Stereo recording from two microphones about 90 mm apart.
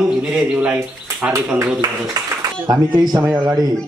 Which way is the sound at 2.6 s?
50° right (ahead or behind).